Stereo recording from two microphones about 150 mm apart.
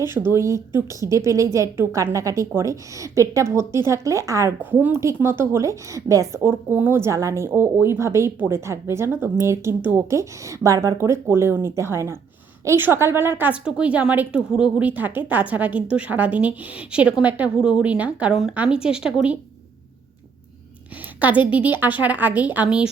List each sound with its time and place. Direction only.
0.0 s a woman's voice: 15° right (ahead or behind)
21.2 s a woman's voice: 10° right (ahead or behind)